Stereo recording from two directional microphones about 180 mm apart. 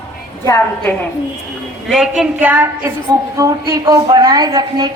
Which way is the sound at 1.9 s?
5° right (ahead or behind).